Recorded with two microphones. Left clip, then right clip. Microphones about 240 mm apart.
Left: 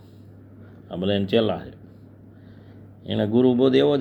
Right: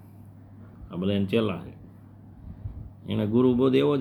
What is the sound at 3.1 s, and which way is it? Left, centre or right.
Speech, centre.